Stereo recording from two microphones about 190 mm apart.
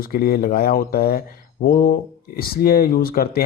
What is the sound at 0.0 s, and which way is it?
Speech, 50° left (ahead or behind).